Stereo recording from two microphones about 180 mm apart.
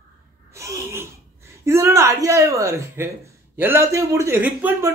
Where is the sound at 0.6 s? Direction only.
15° right (ahead or behind).